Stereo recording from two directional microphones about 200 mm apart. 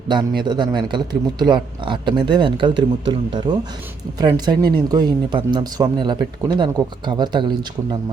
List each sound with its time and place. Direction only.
0.1 s speech: 20° right (ahead or behind)